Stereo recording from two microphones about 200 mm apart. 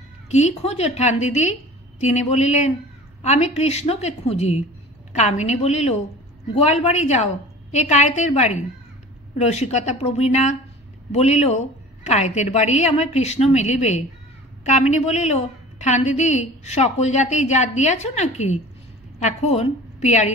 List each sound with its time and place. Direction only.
0.3 s a woman's voice: 35° left (ahead or behind)